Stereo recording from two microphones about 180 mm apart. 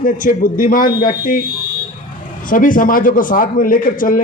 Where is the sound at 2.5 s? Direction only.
50° left (ahead or behind).